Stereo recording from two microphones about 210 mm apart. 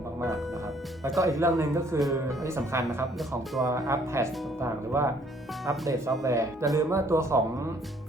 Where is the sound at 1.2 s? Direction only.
15° right (ahead or behind).